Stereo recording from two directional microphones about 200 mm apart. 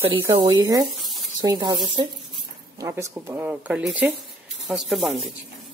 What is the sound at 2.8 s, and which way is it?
Speech, 15° right (ahead or behind).